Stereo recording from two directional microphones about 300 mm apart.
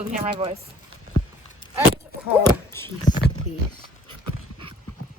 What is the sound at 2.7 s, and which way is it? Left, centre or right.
Speech, centre.